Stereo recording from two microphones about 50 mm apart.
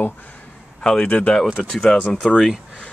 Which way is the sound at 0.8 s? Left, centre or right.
Centre.